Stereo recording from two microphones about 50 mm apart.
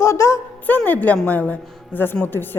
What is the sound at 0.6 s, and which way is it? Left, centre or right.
Speech, left.